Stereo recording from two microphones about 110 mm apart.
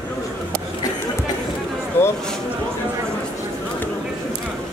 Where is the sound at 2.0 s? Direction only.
20° left (ahead or behind).